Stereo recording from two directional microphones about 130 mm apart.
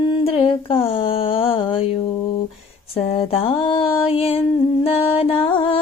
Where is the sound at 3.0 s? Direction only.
45° left (ahead or behind).